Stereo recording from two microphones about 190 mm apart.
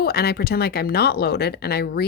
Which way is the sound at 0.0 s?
55° left (ahead or behind).